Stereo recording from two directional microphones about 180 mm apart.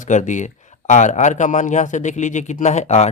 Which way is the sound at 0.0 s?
40° left (ahead or behind).